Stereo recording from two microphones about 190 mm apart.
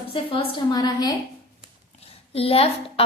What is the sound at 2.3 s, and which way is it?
Speech, 30° left (ahead or behind).